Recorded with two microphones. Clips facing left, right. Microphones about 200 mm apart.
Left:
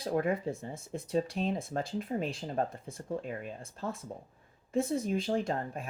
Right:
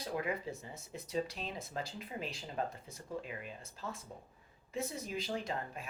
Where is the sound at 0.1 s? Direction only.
50° left (ahead or behind).